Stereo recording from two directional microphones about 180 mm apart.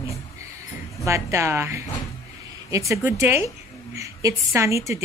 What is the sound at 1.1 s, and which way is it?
A woman's voice, 15° right (ahead or behind).